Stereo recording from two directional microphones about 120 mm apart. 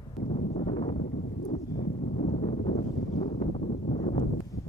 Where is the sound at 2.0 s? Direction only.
85° left.